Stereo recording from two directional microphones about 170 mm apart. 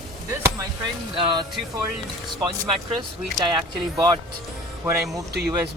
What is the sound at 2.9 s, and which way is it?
Speech, 25° right (ahead or behind).